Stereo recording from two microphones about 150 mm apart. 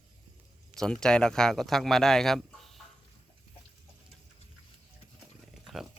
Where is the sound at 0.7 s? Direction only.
5° left (ahead or behind).